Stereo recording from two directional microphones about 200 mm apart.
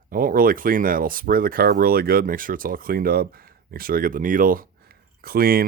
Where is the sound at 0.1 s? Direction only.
45° right (ahead or behind).